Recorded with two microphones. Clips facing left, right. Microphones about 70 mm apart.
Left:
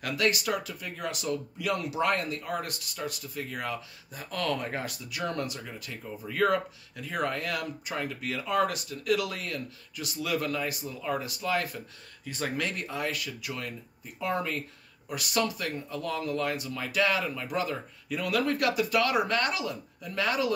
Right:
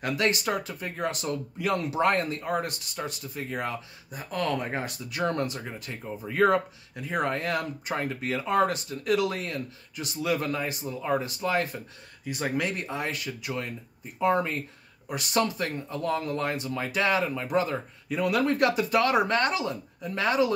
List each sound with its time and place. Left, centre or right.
0.0 s speech: right
12.3 s speech: centre